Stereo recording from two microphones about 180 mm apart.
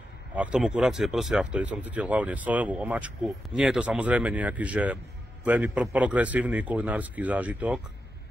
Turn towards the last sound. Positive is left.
turn(degrees=-5)  # may be behind; listen again after turning